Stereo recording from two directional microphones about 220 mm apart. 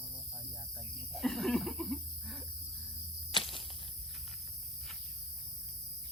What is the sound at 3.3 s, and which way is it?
Walk, 25° left (ahead or behind).